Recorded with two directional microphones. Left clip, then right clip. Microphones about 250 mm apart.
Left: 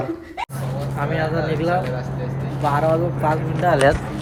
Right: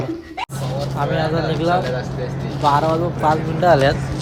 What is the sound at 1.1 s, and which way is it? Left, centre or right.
Speech, centre.